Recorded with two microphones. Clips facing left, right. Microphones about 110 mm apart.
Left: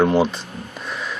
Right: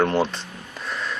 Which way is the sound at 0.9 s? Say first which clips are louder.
Even; 5° left (ahead or behind).